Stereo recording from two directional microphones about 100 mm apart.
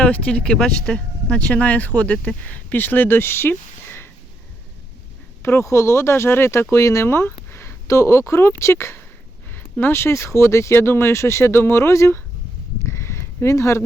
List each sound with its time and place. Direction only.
0.0 s speech: 10° left (ahead or behind)
5.4 s speech: 25° left (ahead or behind)
12.8 s a sound: 25° left (ahead or behind)